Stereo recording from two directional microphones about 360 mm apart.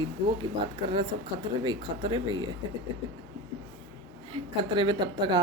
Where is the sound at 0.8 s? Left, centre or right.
Centre.